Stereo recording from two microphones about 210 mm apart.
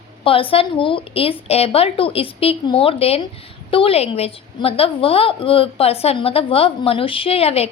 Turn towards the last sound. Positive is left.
turn(degrees=30)  # may be behind; listen again after turning